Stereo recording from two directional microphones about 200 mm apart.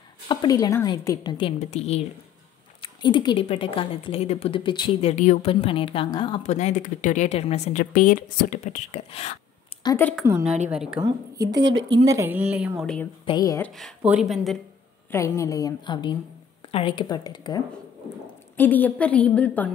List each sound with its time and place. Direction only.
0.3 s a woman's voice: 20° left (ahead or behind)
1.6 s a woman's voice: 30° left (ahead or behind)
5.1 s a woman's voice: 35° left (ahead or behind)
5.5 s a woman's voice: 25° left (ahead or behind)
9.8 s a woman's voice: 10° left (ahead or behind)
10.2 s a woman's voice: 10° right (ahead or behind)
11.0 s a woman's voice: 20° right (ahead or behind)
11.5 s speech: 65° right (ahead or behind)
12.1 s a woman's voice: 10° right (ahead or behind); by 13.1 s 5° left (ahead or behind)
13.2 s a woman's voice: 20° left (ahead or behind)
13.7 s a woman's voice: centre (ahead or behind)
15.0 s a woman's voice: 15° left (ahead or behind)
18.6 s a woman's voice: 10° left (ahead or behind)